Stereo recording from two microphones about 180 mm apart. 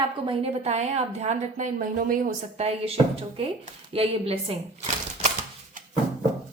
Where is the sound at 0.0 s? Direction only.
30° right (ahead or behind); by 2.3 s 50° right (ahead or behind).